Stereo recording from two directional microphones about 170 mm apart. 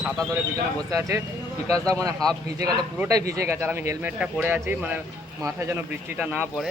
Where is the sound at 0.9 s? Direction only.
15° right (ahead or behind).